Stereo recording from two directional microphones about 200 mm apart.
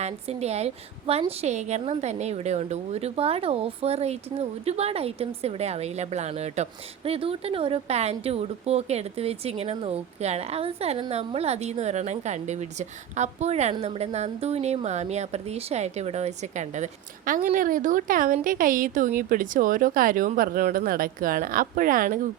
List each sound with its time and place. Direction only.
0.0 s a woman's voice: 30° right (ahead or behind)